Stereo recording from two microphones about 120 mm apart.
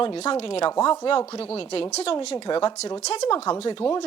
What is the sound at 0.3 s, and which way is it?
A woman's voice, 50° left (ahead or behind).